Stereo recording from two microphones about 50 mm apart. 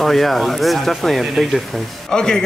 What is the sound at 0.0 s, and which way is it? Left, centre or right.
A man's voice, centre.